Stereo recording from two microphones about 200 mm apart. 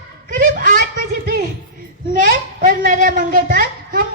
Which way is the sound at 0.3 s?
45° right (ahead or behind).